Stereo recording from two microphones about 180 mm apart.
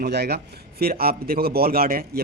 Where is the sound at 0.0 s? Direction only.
65° right (ahead or behind).